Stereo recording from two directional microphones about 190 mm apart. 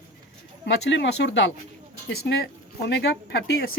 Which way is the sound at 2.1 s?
60° left (ahead or behind).